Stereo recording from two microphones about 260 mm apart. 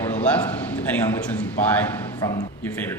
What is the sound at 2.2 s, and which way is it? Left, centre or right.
Speech, centre.